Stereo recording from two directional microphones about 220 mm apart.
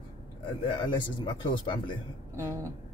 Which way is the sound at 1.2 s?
20° left (ahead or behind).